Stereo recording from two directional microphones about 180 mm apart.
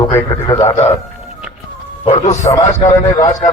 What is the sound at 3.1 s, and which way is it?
Speech, 20° left (ahead or behind).